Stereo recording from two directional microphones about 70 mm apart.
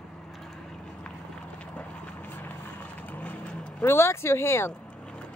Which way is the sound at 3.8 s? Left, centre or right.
Left.